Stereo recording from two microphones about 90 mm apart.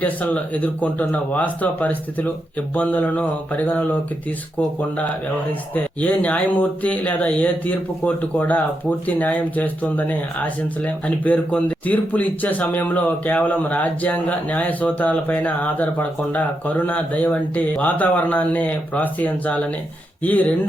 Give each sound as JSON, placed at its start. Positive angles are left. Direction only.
{"t": 0.0, "sound": "speech", "side_deg": 15}